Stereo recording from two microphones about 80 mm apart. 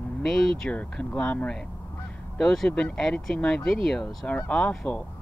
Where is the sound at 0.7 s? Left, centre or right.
Centre.